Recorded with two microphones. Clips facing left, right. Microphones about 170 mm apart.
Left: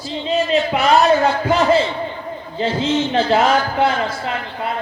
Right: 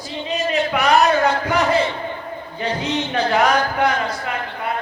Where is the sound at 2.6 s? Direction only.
15° right (ahead or behind).